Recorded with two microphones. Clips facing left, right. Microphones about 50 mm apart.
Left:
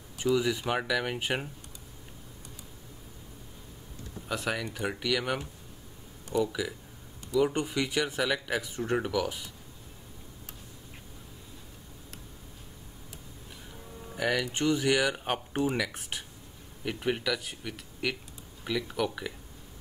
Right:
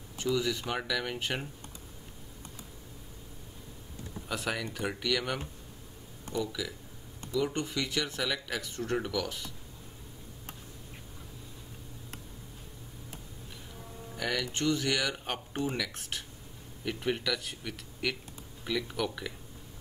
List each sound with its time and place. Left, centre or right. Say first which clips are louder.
0.4 s speech: left 3 dB; centre
4.3 s speech: left 2 dB; centre
6.4 s speech: left 5 dB; centre
14.1 s speech: left 4 dB; centre
15.5 s speech: left 4 dB; left
15.8 s speech: left 3 dB; centre